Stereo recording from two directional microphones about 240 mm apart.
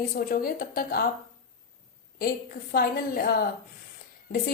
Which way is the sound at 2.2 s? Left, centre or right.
Left.